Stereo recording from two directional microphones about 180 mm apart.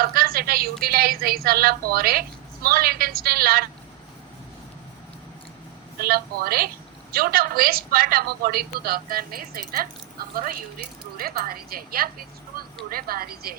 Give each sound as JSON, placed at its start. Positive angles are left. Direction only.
{"t": 0.0, "sound": "a woman's voice", "side_deg": -55}
{"t": 6.0, "sound": "a woman's voice", "side_deg": -55}
{"t": 12.9, "sound": "a woman's voice", "side_deg": -55}